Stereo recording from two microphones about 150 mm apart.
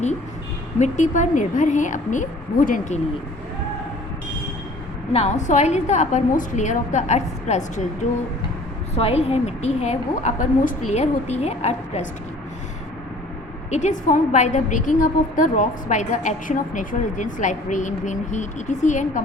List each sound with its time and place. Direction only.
0.8 s a woman's voice: 55° left (ahead or behind)
5.1 s a woman's voice: 50° left (ahead or behind)
9.0 s a woman's voice: 40° left (ahead or behind)
13.7 s a woman's voice: 50° left (ahead or behind)